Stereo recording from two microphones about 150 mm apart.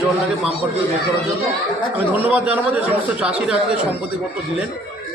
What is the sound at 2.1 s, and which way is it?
A man's voice, 10° right (ahead or behind).